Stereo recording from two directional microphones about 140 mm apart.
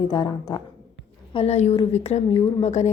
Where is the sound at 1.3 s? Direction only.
45° left (ahead or behind).